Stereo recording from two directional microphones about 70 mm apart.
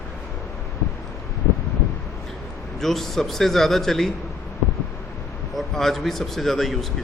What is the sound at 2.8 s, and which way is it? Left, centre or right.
Speech, centre.